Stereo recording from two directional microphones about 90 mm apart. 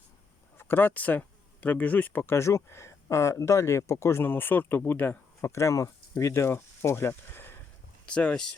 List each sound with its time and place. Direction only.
0.6 s speech: 25° left (ahead or behind)
8.0 s speech: 10° left (ahead or behind)